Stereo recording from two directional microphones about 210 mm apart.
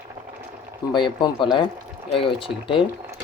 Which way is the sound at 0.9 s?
20° left (ahead or behind).